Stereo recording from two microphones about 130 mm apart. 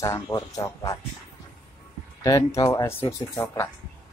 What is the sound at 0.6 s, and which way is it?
Speech, 35° left (ahead or behind).